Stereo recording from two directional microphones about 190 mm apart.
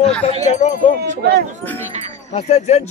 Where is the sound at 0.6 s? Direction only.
40° left (ahead or behind).